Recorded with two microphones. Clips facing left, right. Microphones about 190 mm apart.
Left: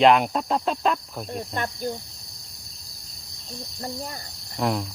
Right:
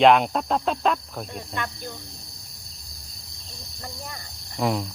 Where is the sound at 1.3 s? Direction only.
40° left (ahead or behind).